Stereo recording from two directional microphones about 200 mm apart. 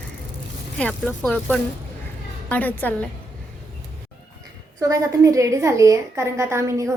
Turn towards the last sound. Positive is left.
turn(degrees=-15)  # may be behind; listen again after turning